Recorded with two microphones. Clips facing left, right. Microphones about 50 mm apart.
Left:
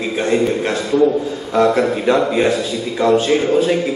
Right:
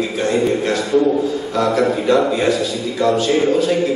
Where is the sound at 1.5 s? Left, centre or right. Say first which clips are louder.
Left 3 dB; left.